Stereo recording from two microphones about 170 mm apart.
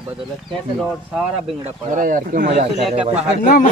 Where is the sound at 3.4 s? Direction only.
50° left (ahead or behind).